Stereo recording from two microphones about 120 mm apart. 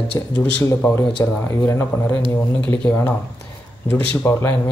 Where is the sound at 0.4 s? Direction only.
15° left (ahead or behind).